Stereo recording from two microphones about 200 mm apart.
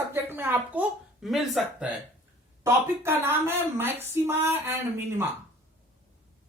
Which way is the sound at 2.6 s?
10° right (ahead or behind).